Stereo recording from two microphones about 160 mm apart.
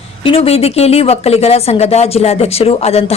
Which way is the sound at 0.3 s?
40° left (ahead or behind).